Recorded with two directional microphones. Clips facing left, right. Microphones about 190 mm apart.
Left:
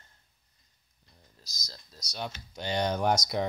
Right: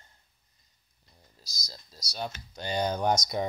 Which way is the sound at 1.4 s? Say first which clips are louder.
Right 2 dB; 10° right (ahead or behind).